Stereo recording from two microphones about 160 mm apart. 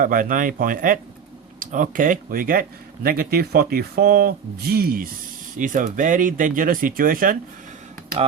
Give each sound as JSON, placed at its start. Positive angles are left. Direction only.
{"t": 0.0, "sound": "speech", "side_deg": -60}
{"t": 5.5, "sound": "speech", "side_deg": -55}